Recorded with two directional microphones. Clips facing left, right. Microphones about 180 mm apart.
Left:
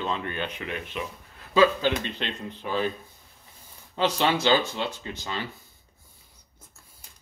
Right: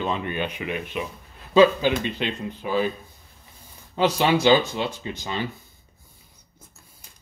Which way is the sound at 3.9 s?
10° right (ahead or behind).